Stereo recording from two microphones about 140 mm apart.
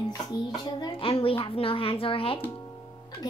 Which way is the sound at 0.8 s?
40° left (ahead or behind).